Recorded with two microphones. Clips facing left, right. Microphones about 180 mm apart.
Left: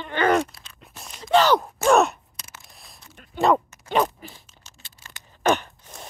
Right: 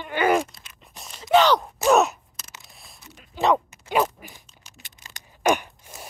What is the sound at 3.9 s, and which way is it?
Crunch, 10° right (ahead or behind).